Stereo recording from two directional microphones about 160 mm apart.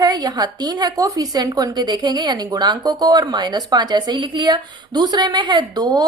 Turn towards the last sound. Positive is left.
turn(degrees=-25)  # may be behind; listen again after turning